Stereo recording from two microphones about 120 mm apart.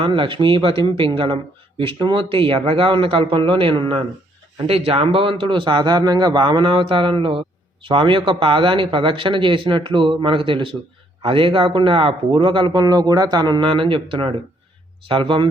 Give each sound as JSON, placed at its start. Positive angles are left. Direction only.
{"t": 0.0, "sound": "a man's voice", "side_deg": -45}